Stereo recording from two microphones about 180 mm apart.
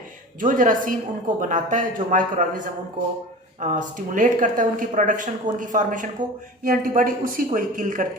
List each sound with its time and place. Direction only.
0.3 s speech: 45° right (ahead or behind)
3.6 s speech: 45° right (ahead or behind)